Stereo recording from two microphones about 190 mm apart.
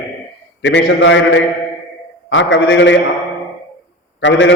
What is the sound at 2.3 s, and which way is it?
Speech, 75° left (ahead or behind).